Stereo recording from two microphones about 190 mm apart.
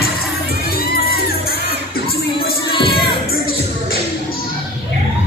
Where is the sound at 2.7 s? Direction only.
25° left (ahead or behind).